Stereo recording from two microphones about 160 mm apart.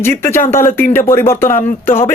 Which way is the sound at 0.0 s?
15° left (ahead or behind).